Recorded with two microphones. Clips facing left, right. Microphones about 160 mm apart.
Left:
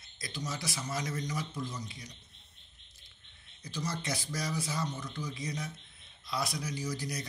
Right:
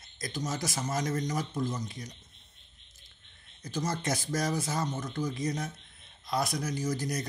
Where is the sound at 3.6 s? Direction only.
45° right (ahead or behind).